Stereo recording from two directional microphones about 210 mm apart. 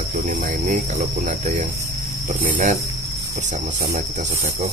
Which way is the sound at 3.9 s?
35° right (ahead or behind).